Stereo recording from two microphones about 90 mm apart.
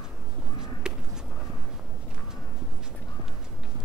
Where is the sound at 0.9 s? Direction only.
10° right (ahead or behind).